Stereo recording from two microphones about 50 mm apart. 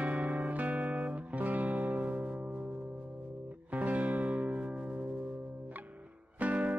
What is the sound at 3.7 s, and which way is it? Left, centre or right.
Music, right.